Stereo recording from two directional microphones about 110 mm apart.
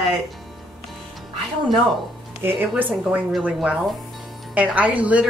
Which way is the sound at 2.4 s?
15° right (ahead or behind).